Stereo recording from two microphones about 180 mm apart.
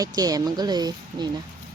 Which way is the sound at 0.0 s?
20° right (ahead or behind).